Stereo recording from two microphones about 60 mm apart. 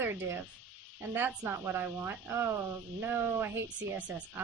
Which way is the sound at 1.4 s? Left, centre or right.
Right.